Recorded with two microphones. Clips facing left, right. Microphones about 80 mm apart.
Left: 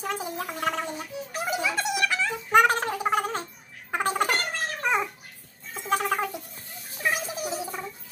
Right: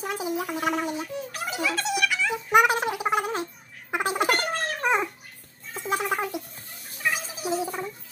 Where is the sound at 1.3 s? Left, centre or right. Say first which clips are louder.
Left 2 dB; centre.